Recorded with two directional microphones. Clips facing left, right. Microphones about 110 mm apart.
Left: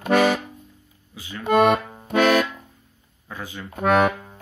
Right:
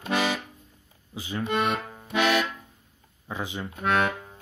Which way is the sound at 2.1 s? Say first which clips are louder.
Left 6 dB; 45° left (ahead or behind).